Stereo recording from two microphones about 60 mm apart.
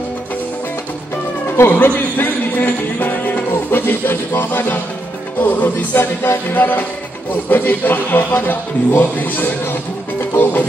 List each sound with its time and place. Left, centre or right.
1.6 s music: left
5.4 s a man's voice: left
10.3 s music: left